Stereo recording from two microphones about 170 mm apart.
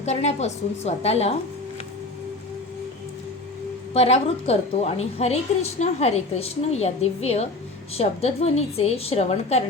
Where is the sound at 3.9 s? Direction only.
35° left (ahead or behind).